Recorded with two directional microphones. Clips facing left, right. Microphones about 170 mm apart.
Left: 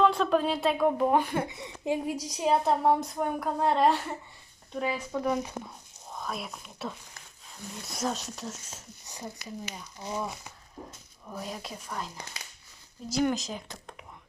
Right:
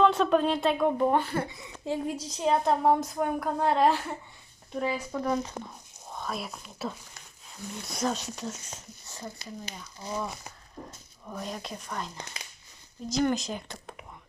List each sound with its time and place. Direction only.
0.0 s a woman's voice: centre (ahead or behind)
1.2 s a woman's voice: 15° left (ahead or behind)
6.1 s a woman's voice: centre (ahead or behind)
9.0 s a sound: 15° left (ahead or behind)
9.7 s speech: 15° left (ahead or behind)
11.3 s a woman's voice: 5° left (ahead or behind)